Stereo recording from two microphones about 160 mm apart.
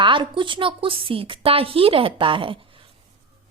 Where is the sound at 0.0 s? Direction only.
30° right (ahead or behind).